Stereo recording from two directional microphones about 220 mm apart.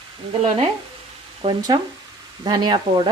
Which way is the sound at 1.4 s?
20° right (ahead or behind).